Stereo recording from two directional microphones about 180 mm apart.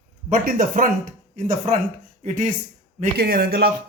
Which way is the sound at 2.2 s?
45° right (ahead or behind).